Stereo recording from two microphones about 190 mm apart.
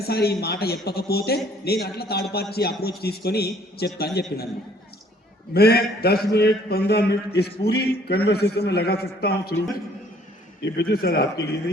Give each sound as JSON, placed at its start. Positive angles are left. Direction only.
{"t": 0.0, "sound": "a man's voice", "side_deg": 55}
{"t": 5.5, "sound": "a man's voice", "side_deg": 55}